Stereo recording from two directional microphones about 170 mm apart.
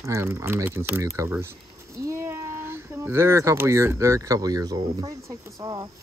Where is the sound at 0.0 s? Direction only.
15° right (ahead or behind).